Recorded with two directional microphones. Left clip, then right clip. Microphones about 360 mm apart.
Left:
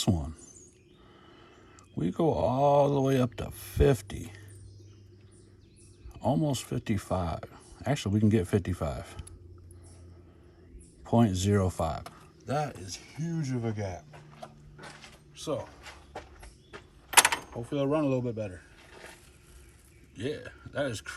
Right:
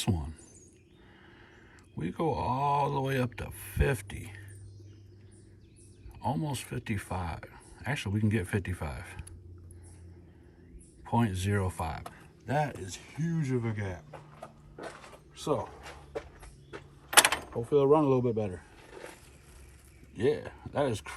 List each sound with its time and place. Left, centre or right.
0.0 s a sound: centre
2.0 s speech: centre
6.2 s speech: centre
11.0 s speech: centre
15.4 s speech: centre
17.7 s speech: centre
20.1 s speech: centre